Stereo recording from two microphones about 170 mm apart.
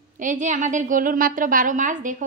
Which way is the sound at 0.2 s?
50° right (ahead or behind).